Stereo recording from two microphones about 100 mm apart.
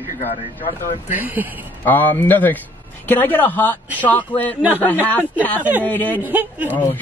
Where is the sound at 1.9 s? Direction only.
20° left (ahead or behind).